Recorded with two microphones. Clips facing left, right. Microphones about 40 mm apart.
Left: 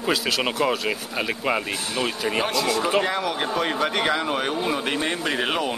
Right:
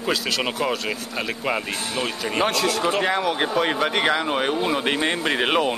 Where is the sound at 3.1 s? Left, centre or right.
Centre.